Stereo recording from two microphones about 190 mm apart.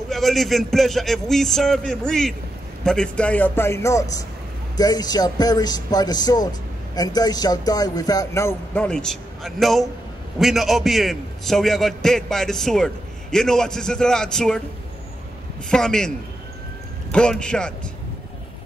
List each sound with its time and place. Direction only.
0.1 s a man's voice: centre (ahead or behind)
15.7 s a man's voice: 5° left (ahead or behind)
17.1 s a man's voice: 5° left (ahead or behind)